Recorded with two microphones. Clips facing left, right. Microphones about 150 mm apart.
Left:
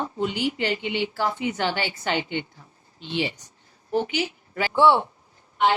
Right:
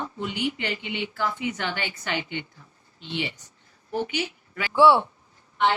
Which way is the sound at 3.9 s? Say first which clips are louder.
Left 3 dB; 35° left (ahead or behind).